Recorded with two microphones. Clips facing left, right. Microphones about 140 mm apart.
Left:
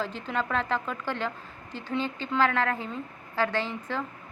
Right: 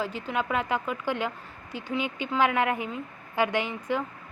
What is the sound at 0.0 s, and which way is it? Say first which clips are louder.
Speech: right 1 dB; 10° right (ahead or behind).